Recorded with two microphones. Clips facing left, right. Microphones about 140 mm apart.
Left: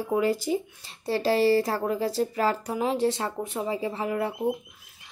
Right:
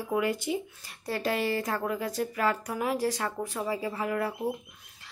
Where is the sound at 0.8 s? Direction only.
25° left (ahead or behind).